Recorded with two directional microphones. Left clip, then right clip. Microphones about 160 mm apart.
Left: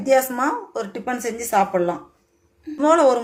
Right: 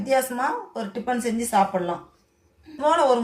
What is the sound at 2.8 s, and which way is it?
Speech, 60° left (ahead or behind).